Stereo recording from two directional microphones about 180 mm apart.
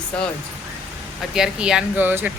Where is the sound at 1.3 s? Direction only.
5° right (ahead or behind).